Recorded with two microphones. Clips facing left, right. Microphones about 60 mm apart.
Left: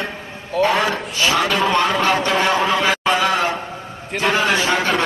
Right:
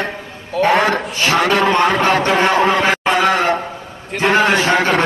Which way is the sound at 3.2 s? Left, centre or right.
Right.